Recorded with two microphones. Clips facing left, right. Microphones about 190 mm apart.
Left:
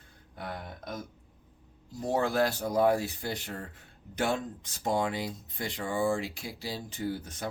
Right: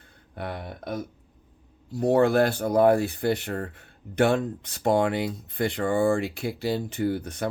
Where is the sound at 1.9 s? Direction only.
65° right (ahead or behind).